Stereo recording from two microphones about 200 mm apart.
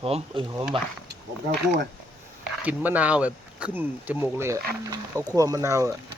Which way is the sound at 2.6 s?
5° right (ahead or behind).